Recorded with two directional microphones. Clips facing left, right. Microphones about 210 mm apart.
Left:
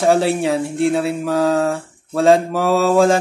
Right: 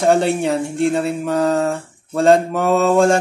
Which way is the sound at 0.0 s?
Centre (ahead or behind).